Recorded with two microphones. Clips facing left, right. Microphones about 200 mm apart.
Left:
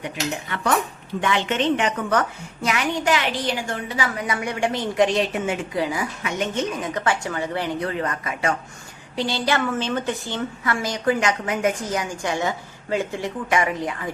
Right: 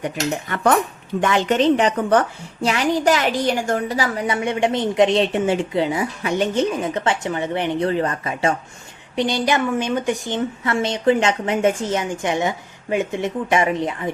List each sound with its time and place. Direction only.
0.0 s a woman's voice: 45° right (ahead or behind); by 14.1 s 25° right (ahead or behind)